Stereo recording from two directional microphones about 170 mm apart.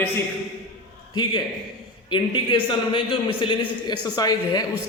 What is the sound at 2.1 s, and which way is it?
A man's voice, 30° left (ahead or behind).